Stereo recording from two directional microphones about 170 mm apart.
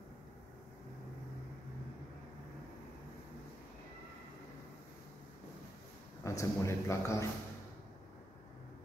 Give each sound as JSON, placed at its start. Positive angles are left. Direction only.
{"t": 6.2, "sound": "a man's voice", "side_deg": 15}